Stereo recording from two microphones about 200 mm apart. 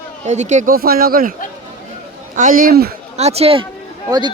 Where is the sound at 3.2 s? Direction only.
30° right (ahead or behind).